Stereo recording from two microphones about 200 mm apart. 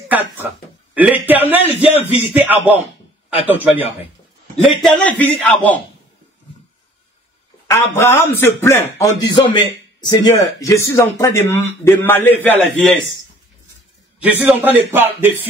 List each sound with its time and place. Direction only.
0.1 s a sound: 10° right (ahead or behind)
2.0 s music: 30° left (ahead or behind)
2.3 s a man's voice: 10° right (ahead or behind)
4.8 s speech: 5° left (ahead or behind)
7.7 s speech: 10° left (ahead or behind)
14.4 s speech: 10° right (ahead or behind)